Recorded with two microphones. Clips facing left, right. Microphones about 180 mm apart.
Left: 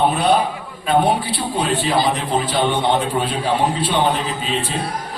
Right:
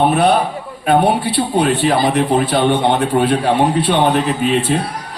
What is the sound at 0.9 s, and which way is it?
A man's voice, 65° right (ahead or behind).